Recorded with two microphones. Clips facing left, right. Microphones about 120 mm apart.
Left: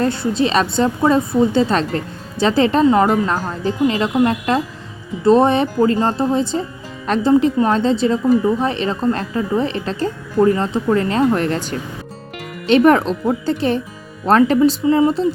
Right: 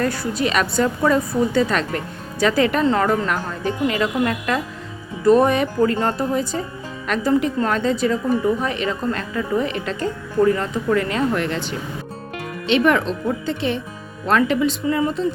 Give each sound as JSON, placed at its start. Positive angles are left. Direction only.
{"t": 0.0, "sound": "a woman's voice", "side_deg": 25}
{"t": 3.3, "sound": "a woman's voice", "side_deg": 35}
{"t": 14.8, "sound": "a woman's voice", "side_deg": 25}